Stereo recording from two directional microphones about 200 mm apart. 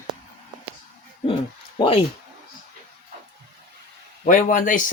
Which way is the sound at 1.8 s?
30° left (ahead or behind).